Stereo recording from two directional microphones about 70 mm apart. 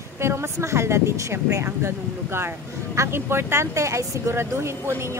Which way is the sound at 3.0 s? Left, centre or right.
Right.